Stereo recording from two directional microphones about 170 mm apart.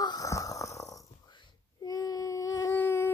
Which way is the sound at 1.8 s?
20° left (ahead or behind).